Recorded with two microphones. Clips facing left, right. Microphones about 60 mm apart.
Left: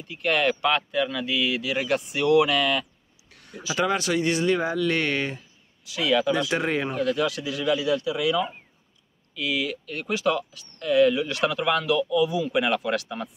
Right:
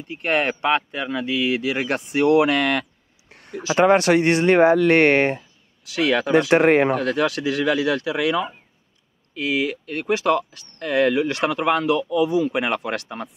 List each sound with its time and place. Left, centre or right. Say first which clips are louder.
0.1 s speech: right 1 dB; right
1.6 s speech: right 2 dB; right
3.3 s a sound: right 9 dB; right
3.7 s speech: right 9 dB; right
9.3 s speech: right 5 dB; right